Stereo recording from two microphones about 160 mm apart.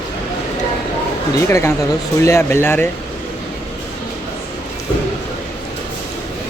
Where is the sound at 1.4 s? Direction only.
15° left (ahead or behind).